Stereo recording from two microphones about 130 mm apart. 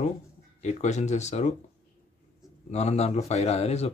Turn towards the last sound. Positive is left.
turn(degrees=55)  # may be behind; listen again after turning